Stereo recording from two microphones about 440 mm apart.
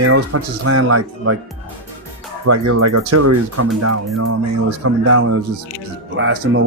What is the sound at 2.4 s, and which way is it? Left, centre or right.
Speech, right.